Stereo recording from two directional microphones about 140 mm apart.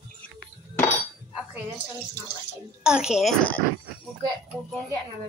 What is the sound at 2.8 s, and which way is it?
Speech, 5° right (ahead or behind).